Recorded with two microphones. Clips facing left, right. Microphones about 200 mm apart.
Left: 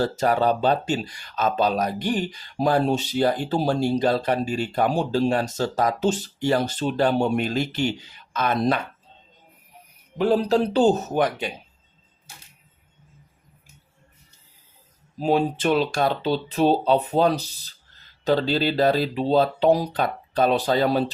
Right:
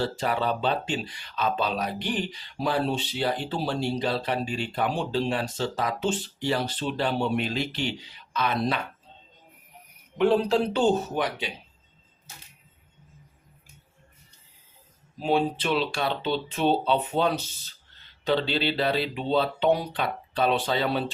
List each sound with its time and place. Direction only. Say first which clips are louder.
0.0 s speech: left 6 dB; 45° left (ahead or behind)
10.2 s speech: left 2 dB; 35° left (ahead or behind)
15.2 s speech: left 4 dB; 40° left (ahead or behind)